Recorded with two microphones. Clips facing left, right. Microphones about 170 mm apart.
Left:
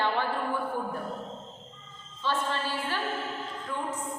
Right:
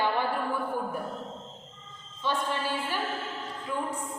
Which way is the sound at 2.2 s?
15° right (ahead or behind).